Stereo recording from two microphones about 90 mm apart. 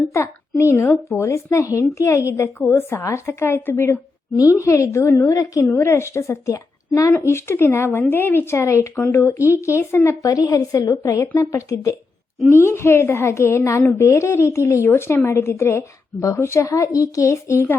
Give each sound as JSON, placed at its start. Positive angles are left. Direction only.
{"t": 0.1, "sound": "a child's voice", "side_deg": 35}
{"t": 5.3, "sound": "a child's voice", "side_deg": 40}
{"t": 5.6, "sound": "a woman's voice", "side_deg": 25}
{"t": 10.2, "sound": "a child's voice", "side_deg": 40}
{"t": 11.2, "sound": "a woman's voice", "side_deg": 25}